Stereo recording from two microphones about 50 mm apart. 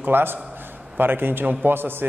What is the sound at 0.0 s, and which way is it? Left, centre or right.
A man's voice, right.